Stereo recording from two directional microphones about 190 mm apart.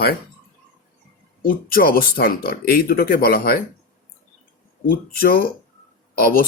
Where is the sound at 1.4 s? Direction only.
50° left (ahead or behind).